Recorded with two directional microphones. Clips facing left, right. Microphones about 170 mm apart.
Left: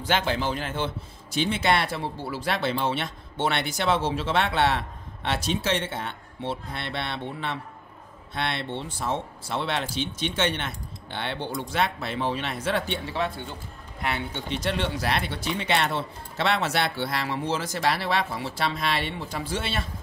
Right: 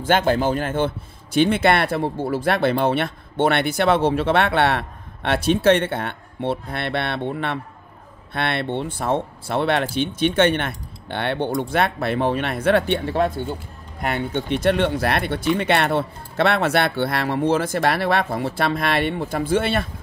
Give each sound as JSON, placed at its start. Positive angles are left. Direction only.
{"t": 0.0, "sound": "speech", "side_deg": -50}